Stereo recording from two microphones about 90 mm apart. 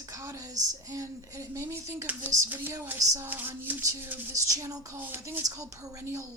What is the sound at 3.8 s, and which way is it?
A woman's voice, 35° right (ahead or behind).